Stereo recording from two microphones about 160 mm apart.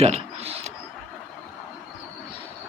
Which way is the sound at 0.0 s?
40° right (ahead or behind).